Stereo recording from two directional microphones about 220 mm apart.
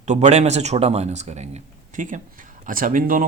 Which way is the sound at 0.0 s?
30° right (ahead or behind).